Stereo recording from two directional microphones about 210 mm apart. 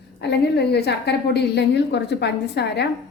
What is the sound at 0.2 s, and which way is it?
A woman's voice, 50° left (ahead or behind).